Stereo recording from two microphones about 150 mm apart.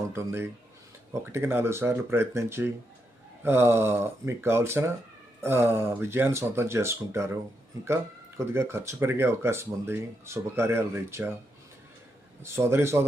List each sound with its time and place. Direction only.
0.1 s speech: 15° right (ahead or behind)
8.4 s speech: 15° right (ahead or behind)
12.4 s speech: 15° right (ahead or behind)